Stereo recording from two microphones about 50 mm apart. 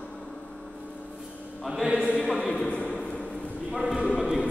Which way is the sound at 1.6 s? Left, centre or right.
Centre.